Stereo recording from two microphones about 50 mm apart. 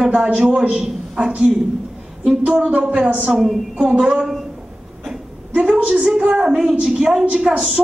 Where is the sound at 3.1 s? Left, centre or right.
Right.